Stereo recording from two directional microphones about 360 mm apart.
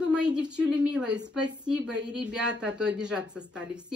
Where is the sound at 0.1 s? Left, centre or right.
Centre.